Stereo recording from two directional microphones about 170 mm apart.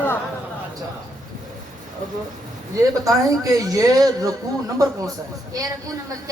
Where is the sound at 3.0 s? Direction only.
20° right (ahead or behind).